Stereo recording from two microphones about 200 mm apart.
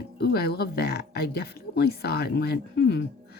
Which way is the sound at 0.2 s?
55° left (ahead or behind).